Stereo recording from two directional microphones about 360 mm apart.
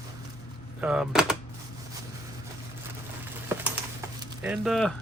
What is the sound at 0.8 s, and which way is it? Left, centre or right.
Speech, centre.